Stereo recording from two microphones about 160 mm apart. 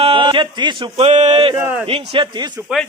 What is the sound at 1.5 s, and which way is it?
Speech, 10° right (ahead or behind).